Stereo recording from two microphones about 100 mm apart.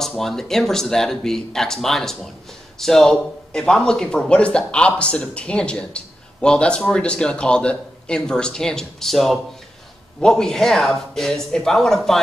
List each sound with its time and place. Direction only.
0.2 s a man's voice: 5° left (ahead or behind)